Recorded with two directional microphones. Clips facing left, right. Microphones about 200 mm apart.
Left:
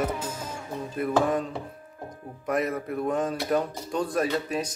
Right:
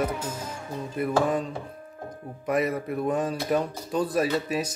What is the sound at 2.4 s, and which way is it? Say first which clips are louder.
Speech: right 2 dB; centre (ahead or behind).